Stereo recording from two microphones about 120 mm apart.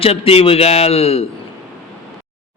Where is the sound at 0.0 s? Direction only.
55° left (ahead or behind).